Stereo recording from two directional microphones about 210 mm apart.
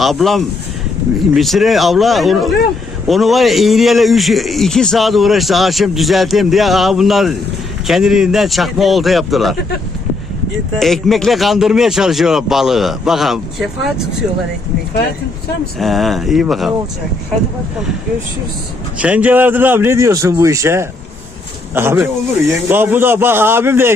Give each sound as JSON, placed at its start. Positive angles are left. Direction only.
{"t": 0.0, "sound": "a man's voice", "side_deg": 0}
{"t": 10.8, "sound": "a man's voice", "side_deg": 0}
{"t": 15.8, "sound": "a man's voice", "side_deg": 0}
{"t": 18.9, "sound": "a man's voice", "side_deg": -5}